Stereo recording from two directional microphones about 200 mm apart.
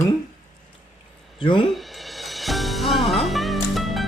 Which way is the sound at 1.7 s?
Centre (ahead or behind).